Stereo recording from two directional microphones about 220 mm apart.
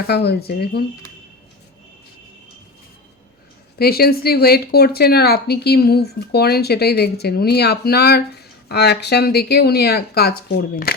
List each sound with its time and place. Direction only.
0.1 s a woman's voice: 50° left (ahead or behind)
3.8 s a woman's voice: 45° left (ahead or behind)